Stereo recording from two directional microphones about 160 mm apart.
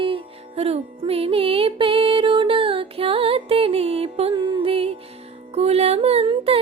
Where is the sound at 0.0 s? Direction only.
35° right (ahead or behind).